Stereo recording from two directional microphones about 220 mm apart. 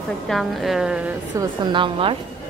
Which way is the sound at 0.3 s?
Centre (ahead or behind).